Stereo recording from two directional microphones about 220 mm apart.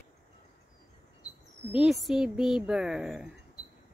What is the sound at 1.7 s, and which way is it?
Speech, centre (ahead or behind).